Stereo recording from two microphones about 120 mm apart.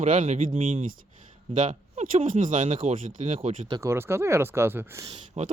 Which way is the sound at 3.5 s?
45° right (ahead or behind).